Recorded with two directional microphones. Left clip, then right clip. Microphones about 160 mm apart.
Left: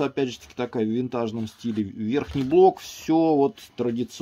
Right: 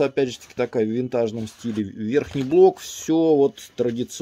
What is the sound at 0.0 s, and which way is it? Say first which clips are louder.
Speech: right 4 dB; 25° right (ahead or behind).